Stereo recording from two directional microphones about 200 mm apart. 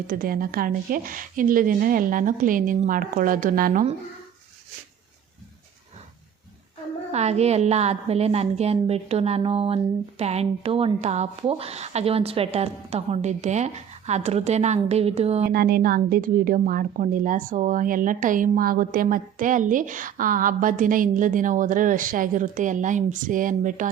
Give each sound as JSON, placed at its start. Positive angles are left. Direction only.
{"t": 0.1, "sound": "a woman's voice", "side_deg": -45}
{"t": 7.1, "sound": "a woman's voice", "side_deg": -35}
{"t": 15.4, "sound": "a woman's voice", "side_deg": -50}